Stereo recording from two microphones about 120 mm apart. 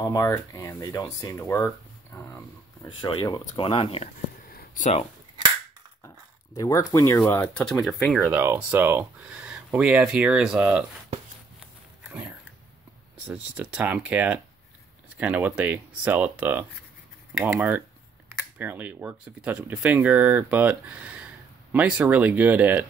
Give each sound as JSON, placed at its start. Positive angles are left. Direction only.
{"t": 0.0, "sound": "speech", "side_deg": 30}
{"t": 3.0, "sound": "speech", "side_deg": 45}
{"t": 6.0, "sound": "a sound", "side_deg": 25}
{"t": 7.2, "sound": "speech", "side_deg": 15}
{"t": 8.3, "sound": "speech", "side_deg": -20}
{"t": 12.0, "sound": "dog", "side_deg": -10}
{"t": 13.2, "sound": "speech", "side_deg": -10}